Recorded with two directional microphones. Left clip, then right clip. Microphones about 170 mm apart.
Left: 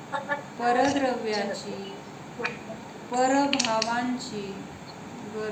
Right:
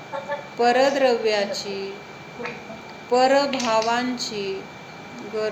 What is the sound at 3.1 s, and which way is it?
Speech, 40° right (ahead or behind).